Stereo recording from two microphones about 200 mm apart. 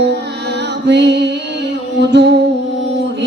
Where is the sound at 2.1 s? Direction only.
60° right (ahead or behind).